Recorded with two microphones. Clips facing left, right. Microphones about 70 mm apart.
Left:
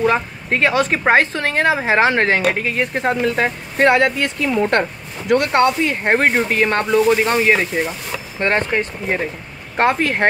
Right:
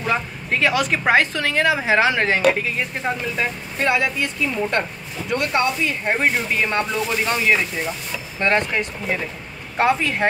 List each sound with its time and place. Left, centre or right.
0.0 s speech: left
9.8 s speech: left